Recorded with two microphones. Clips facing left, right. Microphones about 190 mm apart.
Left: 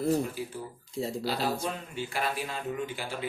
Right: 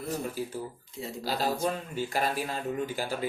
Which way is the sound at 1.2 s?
40° right (ahead or behind).